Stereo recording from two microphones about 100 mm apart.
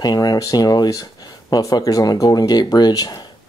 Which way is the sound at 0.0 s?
40° left (ahead or behind).